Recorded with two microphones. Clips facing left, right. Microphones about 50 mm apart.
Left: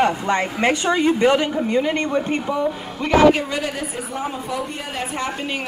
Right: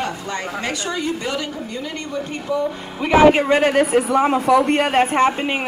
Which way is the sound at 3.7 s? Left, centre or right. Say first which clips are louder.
Right 12 dB; right.